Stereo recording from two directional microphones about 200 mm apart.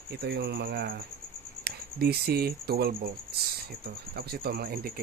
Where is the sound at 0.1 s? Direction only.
55° right (ahead or behind).